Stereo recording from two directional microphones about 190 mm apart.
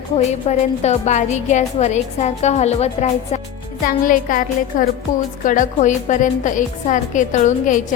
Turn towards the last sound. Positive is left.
turn(degrees=45)  # may be behind; listen again after turning